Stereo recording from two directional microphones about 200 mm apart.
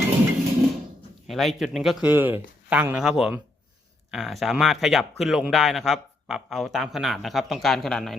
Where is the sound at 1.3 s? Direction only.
Centre (ahead or behind).